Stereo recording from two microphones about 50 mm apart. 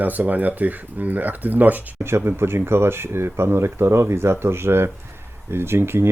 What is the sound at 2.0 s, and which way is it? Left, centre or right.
Speech, right.